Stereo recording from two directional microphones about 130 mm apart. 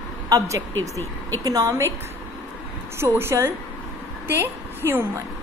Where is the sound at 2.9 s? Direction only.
20° right (ahead or behind).